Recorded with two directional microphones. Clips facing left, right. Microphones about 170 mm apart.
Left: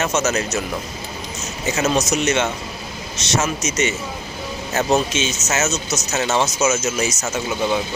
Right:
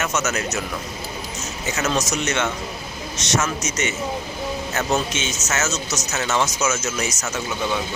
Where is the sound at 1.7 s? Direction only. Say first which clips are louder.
Left 4 dB; 25° left (ahead or behind).